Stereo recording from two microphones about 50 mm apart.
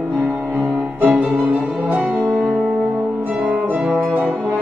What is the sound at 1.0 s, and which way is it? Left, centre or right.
Music, right.